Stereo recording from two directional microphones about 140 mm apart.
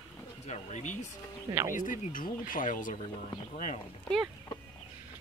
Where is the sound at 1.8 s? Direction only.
70° left (ahead or behind).